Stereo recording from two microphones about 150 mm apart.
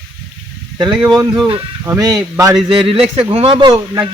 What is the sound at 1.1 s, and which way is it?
Speech, 30° right (ahead or behind).